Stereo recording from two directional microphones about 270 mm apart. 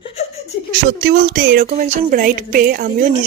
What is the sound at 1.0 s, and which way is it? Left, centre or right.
Speech, right.